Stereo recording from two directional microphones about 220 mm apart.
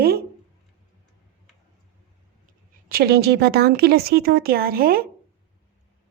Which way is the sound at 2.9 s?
45° right (ahead or behind).